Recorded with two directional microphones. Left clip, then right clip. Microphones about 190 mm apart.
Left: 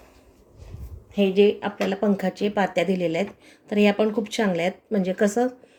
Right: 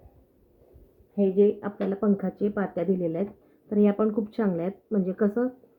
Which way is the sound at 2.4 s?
15° left (ahead or behind).